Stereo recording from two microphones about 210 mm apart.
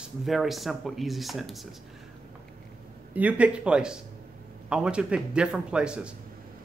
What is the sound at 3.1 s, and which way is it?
Speech, 5° right (ahead or behind).